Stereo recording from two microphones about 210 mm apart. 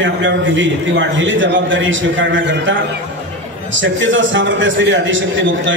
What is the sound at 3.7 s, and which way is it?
A man's voice, 65° right (ahead or behind).